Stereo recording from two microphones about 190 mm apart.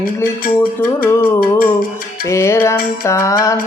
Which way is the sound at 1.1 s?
10° left (ahead or behind).